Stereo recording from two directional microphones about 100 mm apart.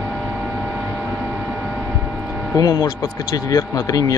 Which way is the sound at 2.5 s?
40° left (ahead or behind).